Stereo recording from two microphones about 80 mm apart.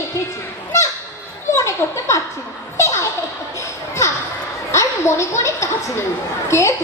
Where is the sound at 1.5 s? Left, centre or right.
Left.